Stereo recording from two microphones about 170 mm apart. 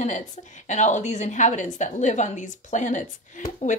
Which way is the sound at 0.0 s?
45° left (ahead or behind).